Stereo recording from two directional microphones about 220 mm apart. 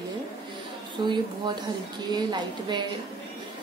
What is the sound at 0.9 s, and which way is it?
A woman's voice, 20° right (ahead or behind).